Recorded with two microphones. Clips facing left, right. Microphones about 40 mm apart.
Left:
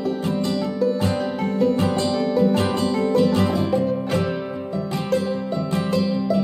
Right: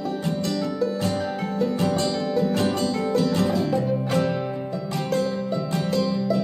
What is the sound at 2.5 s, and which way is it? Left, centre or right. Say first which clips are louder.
Music: left 2 dB; left.